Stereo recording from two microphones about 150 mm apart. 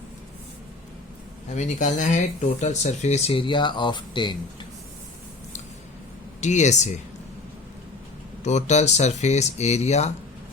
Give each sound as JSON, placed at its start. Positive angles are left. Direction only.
{"t": 1.5, "sound": "speech", "side_deg": 55}
{"t": 6.4, "sound": "speech", "side_deg": 50}
{"t": 8.4, "sound": "speech", "side_deg": 50}